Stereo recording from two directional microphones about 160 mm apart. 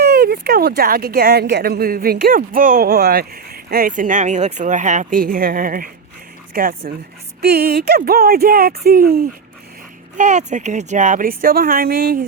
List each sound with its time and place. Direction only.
0.0 s a sound: 85° right
0.8 s a woman's voice: 70° right (ahead or behind)
7.4 s speech: 75° right (ahead or behind)
10.2 s a woman's voice: 50° right (ahead or behind); by 12.2 s 70° right (ahead or behind)